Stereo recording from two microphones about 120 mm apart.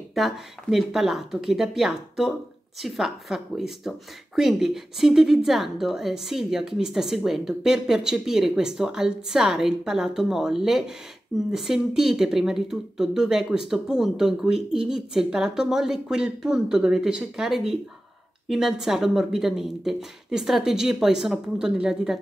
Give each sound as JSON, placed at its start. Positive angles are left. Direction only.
{"t": 0.1, "sound": "a woman's voice", "side_deg": 0}